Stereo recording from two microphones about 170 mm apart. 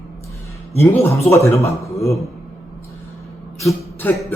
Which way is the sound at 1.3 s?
15° left (ahead or behind).